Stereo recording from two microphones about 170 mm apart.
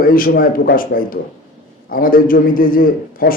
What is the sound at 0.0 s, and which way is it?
A man's voice, 55° left (ahead or behind).